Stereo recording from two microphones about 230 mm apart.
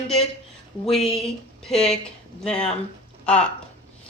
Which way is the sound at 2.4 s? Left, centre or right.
Centre.